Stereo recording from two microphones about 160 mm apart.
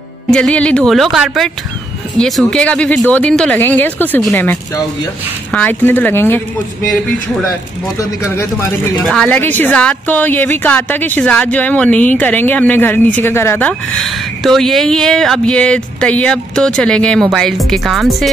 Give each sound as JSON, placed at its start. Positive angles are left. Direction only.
{"t": 0.3, "sound": "a woman's voice", "side_deg": 5}
{"t": 5.5, "sound": "a woman's voice", "side_deg": 10}
{"t": 9.0, "sound": "a woman's voice", "side_deg": 5}